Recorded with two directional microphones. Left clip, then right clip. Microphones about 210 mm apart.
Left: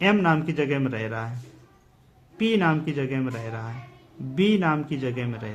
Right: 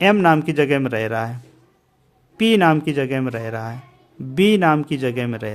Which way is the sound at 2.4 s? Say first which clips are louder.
Right 8 dB; 45° right (ahead or behind).